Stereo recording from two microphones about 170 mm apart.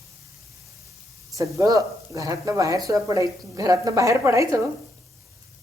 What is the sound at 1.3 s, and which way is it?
A woman's voice, 20° right (ahead or behind).